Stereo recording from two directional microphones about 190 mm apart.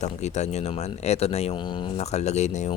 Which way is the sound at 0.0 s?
35° left (ahead or behind).